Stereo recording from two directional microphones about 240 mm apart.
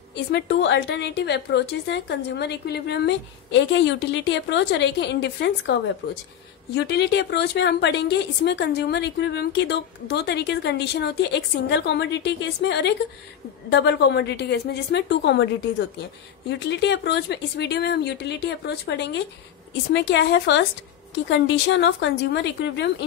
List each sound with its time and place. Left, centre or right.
0.1 s a woman's voice: left